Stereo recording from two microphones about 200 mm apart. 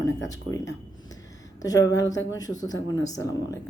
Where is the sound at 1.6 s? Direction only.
20° left (ahead or behind).